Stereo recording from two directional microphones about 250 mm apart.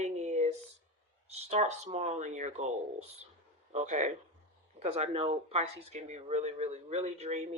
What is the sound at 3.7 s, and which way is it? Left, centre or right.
Speech, right.